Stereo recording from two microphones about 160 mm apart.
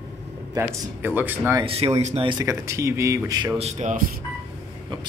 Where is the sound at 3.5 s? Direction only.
40° right (ahead or behind).